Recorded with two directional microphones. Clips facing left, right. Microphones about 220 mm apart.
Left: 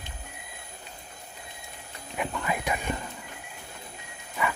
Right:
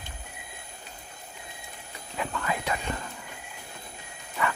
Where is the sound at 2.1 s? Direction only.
15° left (ahead or behind).